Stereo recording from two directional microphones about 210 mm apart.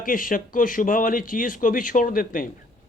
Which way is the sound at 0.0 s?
40° left (ahead or behind).